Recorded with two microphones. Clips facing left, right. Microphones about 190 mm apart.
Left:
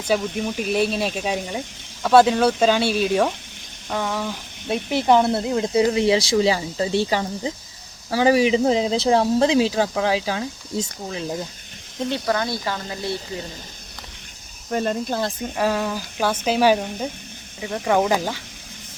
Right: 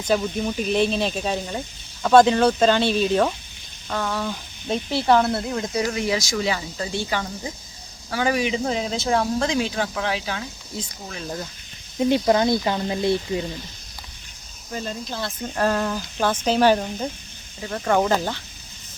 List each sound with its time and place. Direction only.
0.1 s speech: 5° left (ahead or behind); by 11.2 s 35° left (ahead or behind)
11.9 s speech: 15° right (ahead or behind)
14.7 s speech: 60° left (ahead or behind)
15.5 s speech: 5° left (ahead or behind)